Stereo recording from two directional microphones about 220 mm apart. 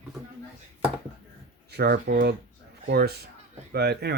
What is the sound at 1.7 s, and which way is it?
Speech, 45° right (ahead or behind).